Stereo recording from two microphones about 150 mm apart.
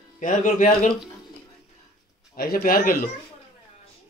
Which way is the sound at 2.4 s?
90° left.